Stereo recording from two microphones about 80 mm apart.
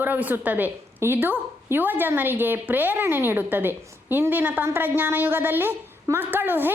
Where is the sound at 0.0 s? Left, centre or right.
Right.